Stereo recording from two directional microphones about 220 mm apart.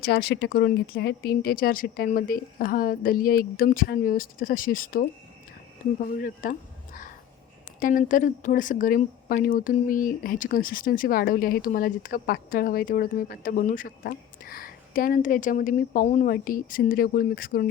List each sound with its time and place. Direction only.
0.0 s speech: 45° left (ahead or behind)
6.1 s a sound: 40° left (ahead or behind)
7.8 s speech: 40° left (ahead or behind)